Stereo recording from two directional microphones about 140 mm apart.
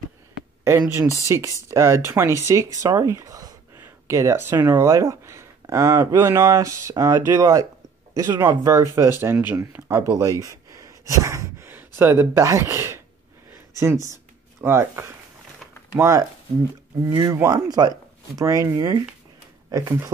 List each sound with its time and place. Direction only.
0.7 s speech: 20° right (ahead or behind)
10.4 s a sound: 20° right (ahead or behind)
14.6 s speech: 15° right (ahead or behind)
17.3 s speech: 20° right (ahead or behind)